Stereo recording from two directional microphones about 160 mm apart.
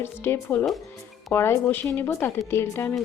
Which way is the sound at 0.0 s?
15° left (ahead or behind).